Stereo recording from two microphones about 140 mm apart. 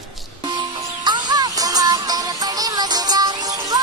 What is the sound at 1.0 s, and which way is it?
Music, 30° right (ahead or behind).